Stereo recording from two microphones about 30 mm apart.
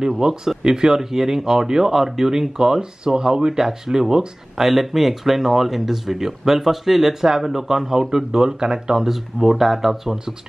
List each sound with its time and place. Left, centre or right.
0.2 s speech: centre
9.0 s speech: centre